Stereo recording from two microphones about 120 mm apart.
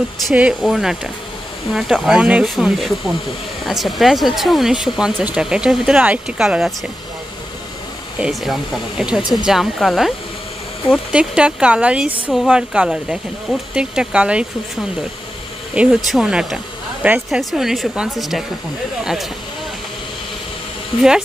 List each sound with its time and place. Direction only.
0.3 s speech: 10° right (ahead or behind)
8.2 s speech: centre (ahead or behind)